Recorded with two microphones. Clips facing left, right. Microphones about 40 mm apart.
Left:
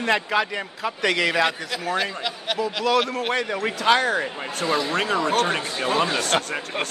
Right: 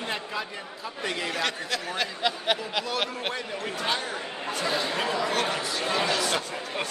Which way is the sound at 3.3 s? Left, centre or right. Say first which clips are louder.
Left 8 dB; left.